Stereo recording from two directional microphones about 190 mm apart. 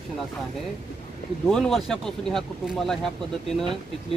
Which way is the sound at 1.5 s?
Centre (ahead or behind).